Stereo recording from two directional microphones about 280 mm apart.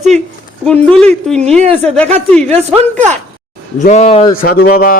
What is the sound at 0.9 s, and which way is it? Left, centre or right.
Speech, centre.